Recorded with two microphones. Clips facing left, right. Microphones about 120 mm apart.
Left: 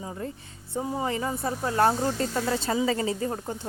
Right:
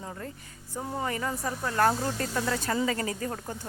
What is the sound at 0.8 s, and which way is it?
Speech, 10° left (ahead or behind).